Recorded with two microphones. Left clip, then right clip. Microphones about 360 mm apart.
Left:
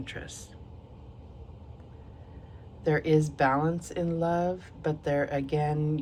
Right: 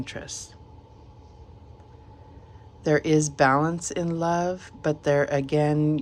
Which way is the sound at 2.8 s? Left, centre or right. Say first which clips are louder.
Right 4 dB; centre.